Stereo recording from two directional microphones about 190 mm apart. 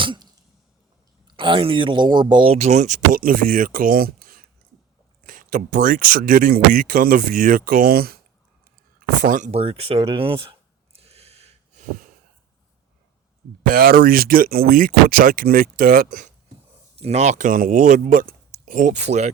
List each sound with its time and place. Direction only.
0.0 s cough: 25° right (ahead or behind)
1.3 s speech: 25° right (ahead or behind); by 8.2 s 55° right (ahead or behind)
9.0 s a sound: 45° right (ahead or behind)
13.7 s speech: 50° right (ahead or behind)